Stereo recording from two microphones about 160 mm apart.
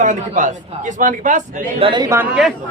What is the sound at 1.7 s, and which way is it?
Speech, 30° right (ahead or behind).